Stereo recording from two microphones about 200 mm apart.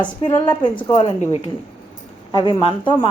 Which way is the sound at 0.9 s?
30° left (ahead or behind).